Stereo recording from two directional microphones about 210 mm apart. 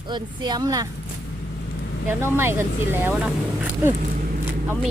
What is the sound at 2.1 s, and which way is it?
Speech, 10° right (ahead or behind).